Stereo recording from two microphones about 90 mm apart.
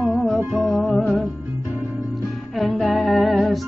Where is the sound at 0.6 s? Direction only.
Centre (ahead or behind).